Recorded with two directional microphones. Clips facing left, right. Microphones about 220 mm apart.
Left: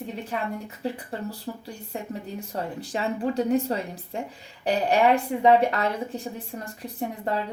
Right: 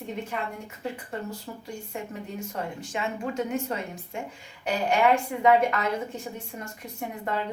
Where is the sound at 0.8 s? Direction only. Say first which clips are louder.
Left 2 dB; 35° left (ahead or behind).